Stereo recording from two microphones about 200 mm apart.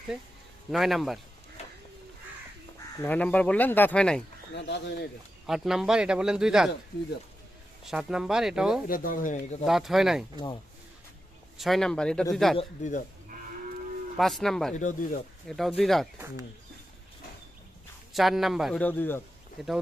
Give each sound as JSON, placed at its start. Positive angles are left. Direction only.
{"t": 0.7, "sound": "speech", "side_deg": 0}
{"t": 3.0, "sound": "speech", "side_deg": 10}
{"t": 4.7, "sound": "speech", "side_deg": 60}
{"t": 5.5, "sound": "speech", "side_deg": 0}
{"t": 7.9, "sound": "speech", "side_deg": -5}
{"t": 8.9, "sound": "speech", "side_deg": 45}
{"t": 9.6, "sound": "speech", "side_deg": 0}
{"t": 11.5, "sound": "speech", "side_deg": 0}
{"t": 12.5, "sound": "speech", "side_deg": 35}
{"t": 14.2, "sound": "speech", "side_deg": 0}
{"t": 14.8, "sound": "speech", "side_deg": 40}
{"t": 15.4, "sound": "speech", "side_deg": 0}
{"t": 18.1, "sound": "speech", "side_deg": 0}